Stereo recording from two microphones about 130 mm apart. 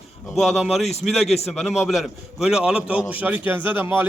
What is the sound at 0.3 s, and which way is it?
A man's voice, centre (ahead or behind).